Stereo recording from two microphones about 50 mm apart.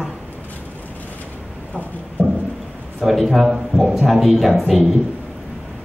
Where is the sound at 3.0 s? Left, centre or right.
Centre.